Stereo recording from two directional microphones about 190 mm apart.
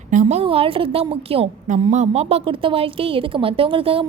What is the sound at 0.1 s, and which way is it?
A woman's voice, 40° right (ahead or behind).